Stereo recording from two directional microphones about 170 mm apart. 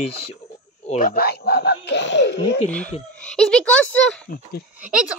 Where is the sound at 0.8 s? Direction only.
50° left (ahead or behind); by 2.6 s 90° left.